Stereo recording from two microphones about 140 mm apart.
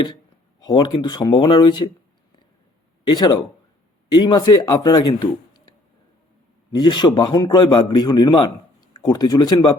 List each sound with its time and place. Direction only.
0.6 s speech: 30° left (ahead or behind)
3.1 s speech: 35° left (ahead or behind)
6.7 s speech: 35° left (ahead or behind)